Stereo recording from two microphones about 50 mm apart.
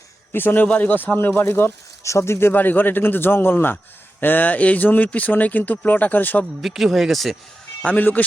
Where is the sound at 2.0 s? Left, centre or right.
Left.